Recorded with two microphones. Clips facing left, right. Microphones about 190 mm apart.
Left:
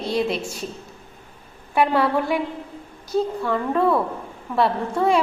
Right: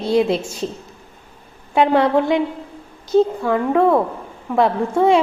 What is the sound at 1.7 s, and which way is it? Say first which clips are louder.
A woman's voice: right 5 dB; 20° right (ahead or behind).